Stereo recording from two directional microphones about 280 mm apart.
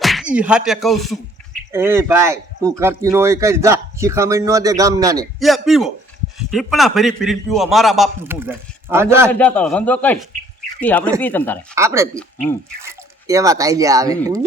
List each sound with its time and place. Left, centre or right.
0.0 s a man's voice: centre
5.4 s a man's voice: centre
9.3 s a man's voice: centre
11.7 s a man's voice: centre
12.1 s a man's voice: centre
12.8 s speech: centre